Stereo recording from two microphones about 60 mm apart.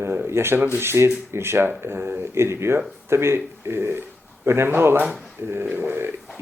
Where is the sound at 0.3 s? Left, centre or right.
Right.